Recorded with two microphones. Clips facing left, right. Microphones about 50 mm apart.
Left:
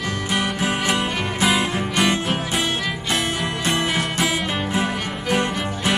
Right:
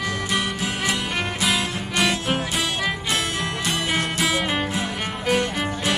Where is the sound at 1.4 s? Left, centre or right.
Left.